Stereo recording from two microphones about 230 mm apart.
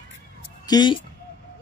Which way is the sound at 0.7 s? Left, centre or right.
Centre.